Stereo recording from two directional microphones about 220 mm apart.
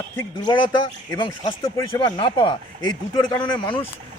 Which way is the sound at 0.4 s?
20° left (ahead or behind).